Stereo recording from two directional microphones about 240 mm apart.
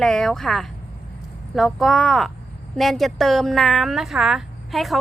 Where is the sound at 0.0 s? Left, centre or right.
Centre.